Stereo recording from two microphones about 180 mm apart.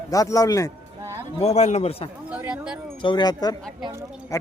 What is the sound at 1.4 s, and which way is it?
Speech, 40° left (ahead or behind).